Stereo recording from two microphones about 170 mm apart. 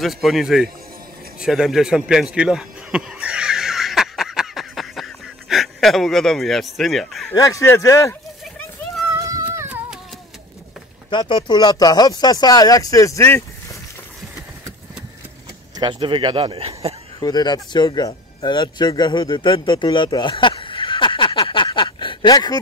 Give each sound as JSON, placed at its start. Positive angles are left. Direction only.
{"t": 0.0, "sound": "a man's voice", "side_deg": 0}
{"t": 1.4, "sound": "a sound", "side_deg": -5}
{"t": 7.2, "sound": "speech", "side_deg": 20}
{"t": 9.2, "sound": "a sound", "side_deg": -20}
{"t": 11.1, "sound": "speech", "side_deg": 30}
{"t": 15.8, "sound": "speech", "side_deg": -30}
{"t": 17.2, "sound": "speech", "side_deg": 25}